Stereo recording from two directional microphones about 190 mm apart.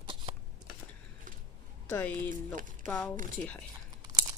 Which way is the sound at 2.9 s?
5° left (ahead or behind).